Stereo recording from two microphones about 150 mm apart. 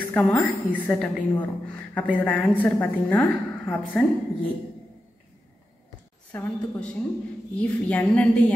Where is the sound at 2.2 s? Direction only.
10° left (ahead or behind).